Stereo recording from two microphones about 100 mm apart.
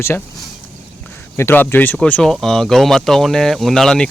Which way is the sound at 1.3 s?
25° left (ahead or behind).